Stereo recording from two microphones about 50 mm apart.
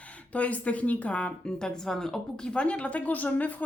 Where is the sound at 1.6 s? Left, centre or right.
Centre.